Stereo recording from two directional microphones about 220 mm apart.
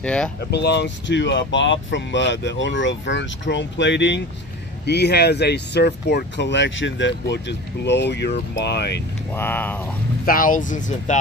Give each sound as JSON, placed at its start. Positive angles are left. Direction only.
{"t": 0.0, "sound": "speech", "side_deg": 5}
{"t": 0.5, "sound": "speech", "side_deg": 50}
{"t": 9.3, "sound": "speech", "side_deg": 10}
{"t": 10.2, "sound": "speech", "side_deg": 40}